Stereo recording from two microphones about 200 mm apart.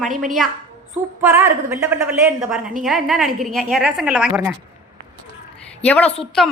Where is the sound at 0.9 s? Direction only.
10° right (ahead or behind).